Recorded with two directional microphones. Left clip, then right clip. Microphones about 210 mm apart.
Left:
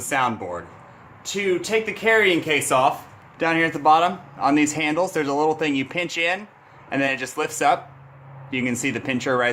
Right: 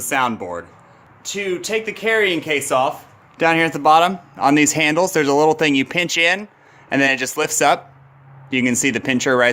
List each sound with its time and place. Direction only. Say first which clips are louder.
0.0 s speech: right 3 dB; 50° right (ahead or behind); by 2.9 s 25° right (ahead or behind)
3.3 s speech: right 5 dB; 55° right (ahead or behind)